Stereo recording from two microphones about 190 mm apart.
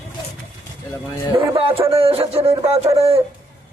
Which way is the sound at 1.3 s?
30° right (ahead or behind).